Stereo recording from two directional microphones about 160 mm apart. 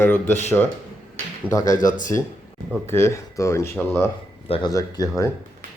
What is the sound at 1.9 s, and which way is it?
Speech, 55° left (ahead or behind).